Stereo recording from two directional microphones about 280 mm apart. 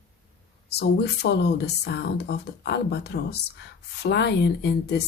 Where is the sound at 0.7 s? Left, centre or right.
Left.